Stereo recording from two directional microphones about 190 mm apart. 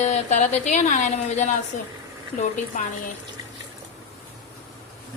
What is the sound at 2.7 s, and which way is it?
Speech, 40° left (ahead or behind).